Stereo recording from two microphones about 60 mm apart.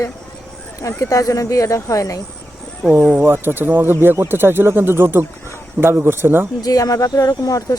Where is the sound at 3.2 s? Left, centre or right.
Right.